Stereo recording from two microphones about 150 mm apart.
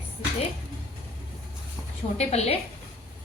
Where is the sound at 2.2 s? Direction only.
45° left (ahead or behind).